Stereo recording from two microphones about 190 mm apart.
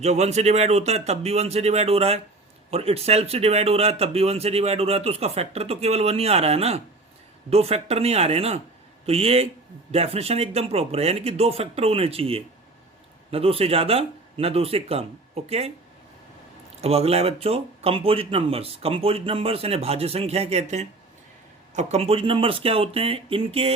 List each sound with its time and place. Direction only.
0.0 s speech: 35° right (ahead or behind)
16.8 s speech: 35° right (ahead or behind)